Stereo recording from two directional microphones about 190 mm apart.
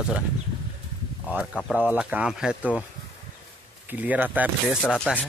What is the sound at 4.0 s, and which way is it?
Speech, 10° right (ahead or behind).